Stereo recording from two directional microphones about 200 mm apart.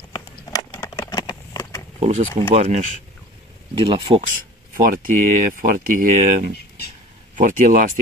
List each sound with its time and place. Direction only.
0.1 s a sound: 20° left (ahead or behind)
2.0 s speech: 30° right (ahead or behind)
5.0 s speech: 45° right (ahead or behind)